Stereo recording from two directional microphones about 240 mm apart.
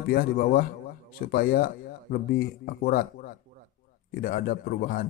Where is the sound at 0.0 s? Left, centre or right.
Left.